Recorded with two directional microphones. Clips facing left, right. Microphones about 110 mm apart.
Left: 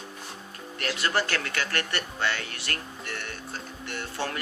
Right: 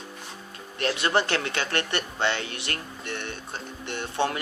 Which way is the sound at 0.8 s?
20° right (ahead or behind).